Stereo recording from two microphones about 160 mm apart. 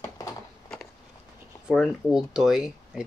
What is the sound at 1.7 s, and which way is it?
Speech, centre (ahead or behind).